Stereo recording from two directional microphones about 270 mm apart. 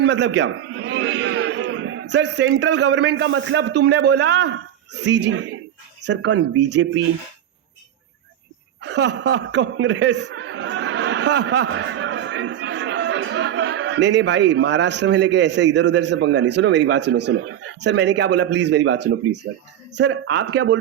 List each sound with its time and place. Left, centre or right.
0.0 s a man's voice: right
8.8 s a man's voice: right
19.0 s a man's voice: right